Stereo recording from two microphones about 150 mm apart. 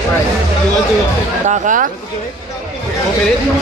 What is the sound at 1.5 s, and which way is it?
Speech, 60° right (ahead or behind).